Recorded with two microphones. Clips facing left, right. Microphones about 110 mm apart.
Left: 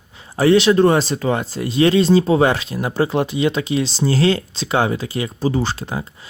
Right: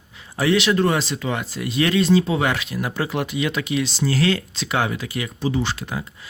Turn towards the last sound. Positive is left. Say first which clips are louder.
# left 3 dB
turn(degrees=30)  # may be behind; listen again after turning